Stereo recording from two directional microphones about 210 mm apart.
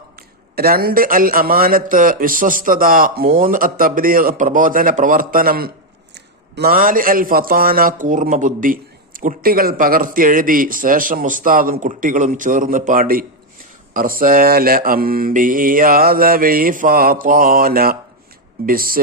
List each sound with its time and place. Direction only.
0.5 s a man's voice: 45° right (ahead or behind)
13.9 s mantra: 40° right (ahead or behind)